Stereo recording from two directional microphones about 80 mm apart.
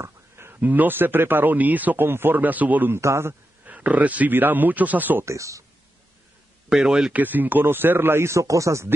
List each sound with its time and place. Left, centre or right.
0.0 s speech: right
3.0 s speech: right
3.6 s speech: centre
5.2 s speech: right
6.7 s speech: centre; by 8.9 s right